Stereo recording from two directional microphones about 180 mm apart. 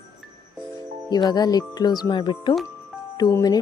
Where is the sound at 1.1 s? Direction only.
20° left (ahead or behind).